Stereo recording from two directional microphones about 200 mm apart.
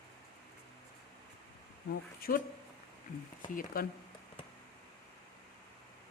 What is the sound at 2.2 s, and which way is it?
Speech, 45° left (ahead or behind).